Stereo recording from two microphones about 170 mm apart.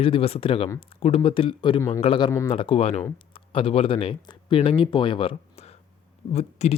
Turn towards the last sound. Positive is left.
turn(degrees=40)  # may be behind; listen again after turning